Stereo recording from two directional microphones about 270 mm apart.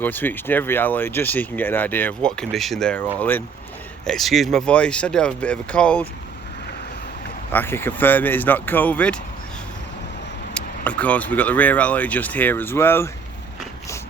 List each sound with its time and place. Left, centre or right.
0.0 s speech: centre
7.5 s speech: centre
10.5 s speech: centre